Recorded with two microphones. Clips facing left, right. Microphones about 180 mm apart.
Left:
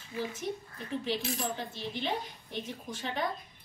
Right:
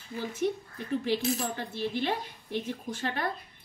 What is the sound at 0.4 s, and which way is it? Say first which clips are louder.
Speech: right 10 dB; 70° right (ahead or behind).